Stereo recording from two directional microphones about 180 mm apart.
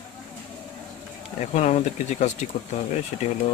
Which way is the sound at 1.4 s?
40° left (ahead or behind).